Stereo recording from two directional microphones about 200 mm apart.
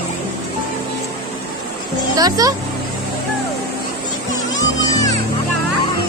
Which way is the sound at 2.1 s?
20° right (ahead or behind).